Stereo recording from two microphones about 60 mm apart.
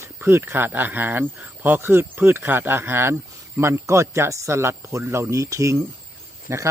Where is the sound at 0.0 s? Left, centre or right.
Right.